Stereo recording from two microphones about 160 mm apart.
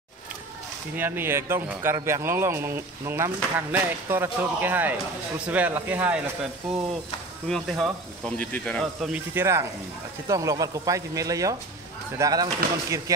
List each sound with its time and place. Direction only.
0.9 s speech: 15° right (ahead or behind); by 9.1 s 5° left (ahead or behind)
9.1 s speech: 15° right (ahead or behind)